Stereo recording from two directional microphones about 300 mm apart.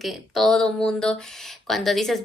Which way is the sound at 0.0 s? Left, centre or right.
Centre.